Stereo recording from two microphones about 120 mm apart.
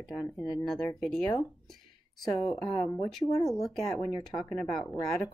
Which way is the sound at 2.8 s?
30° left (ahead or behind).